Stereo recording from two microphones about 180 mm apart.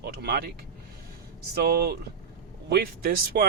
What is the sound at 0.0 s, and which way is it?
Speech, 60° right (ahead or behind).